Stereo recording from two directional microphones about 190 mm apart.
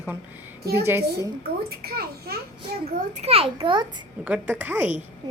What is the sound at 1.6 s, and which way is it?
Speech, 55° right (ahead or behind).